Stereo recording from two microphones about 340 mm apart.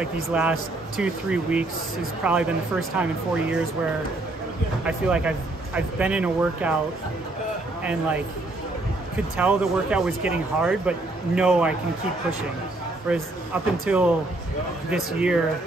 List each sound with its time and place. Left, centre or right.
0.0 s speech: centre
4.8 s speech: centre
7.8 s speech: centre
9.4 s speech: centre
13.8 s speech: centre